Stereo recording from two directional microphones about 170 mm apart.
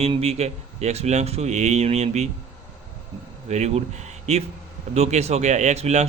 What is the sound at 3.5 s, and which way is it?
Speech, 40° right (ahead or behind).